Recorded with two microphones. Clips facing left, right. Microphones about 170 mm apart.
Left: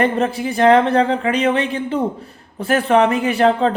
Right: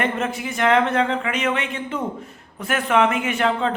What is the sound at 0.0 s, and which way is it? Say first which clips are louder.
Speech: left 6 dB; 35° left (ahead or behind).